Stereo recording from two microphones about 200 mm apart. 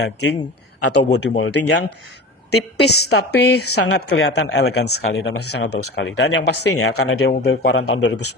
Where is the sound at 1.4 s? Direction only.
55° left (ahead or behind).